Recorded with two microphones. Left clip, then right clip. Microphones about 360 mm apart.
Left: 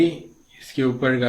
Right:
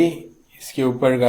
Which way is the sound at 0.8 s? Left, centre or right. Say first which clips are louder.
Right 2 dB; right.